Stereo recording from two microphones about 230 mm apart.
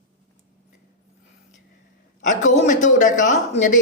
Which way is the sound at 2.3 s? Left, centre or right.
Left.